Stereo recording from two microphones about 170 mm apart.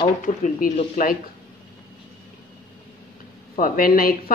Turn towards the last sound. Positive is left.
turn(degrees=60)  # may be behind; listen again after turning